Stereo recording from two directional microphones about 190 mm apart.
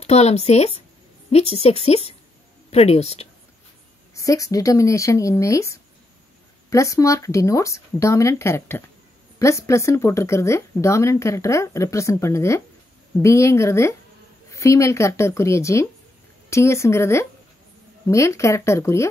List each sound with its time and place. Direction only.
0.0 s speech: 35° left (ahead or behind)
4.1 s speech: 15° left (ahead or behind)